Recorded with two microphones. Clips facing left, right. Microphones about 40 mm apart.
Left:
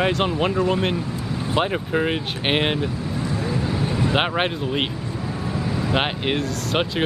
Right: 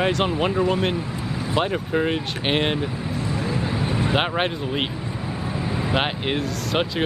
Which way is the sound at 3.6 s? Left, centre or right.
Centre.